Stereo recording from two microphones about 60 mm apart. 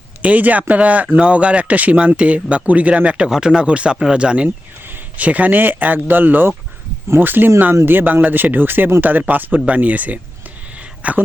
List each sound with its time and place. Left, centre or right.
0.2 s speech: right